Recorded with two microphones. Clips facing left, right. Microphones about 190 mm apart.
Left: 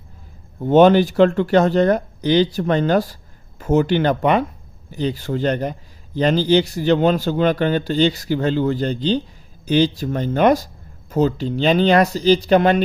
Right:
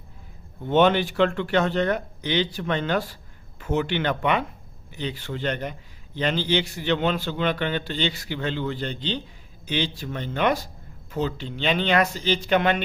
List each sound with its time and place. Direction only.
0.6 s a man's voice: 40° left (ahead or behind)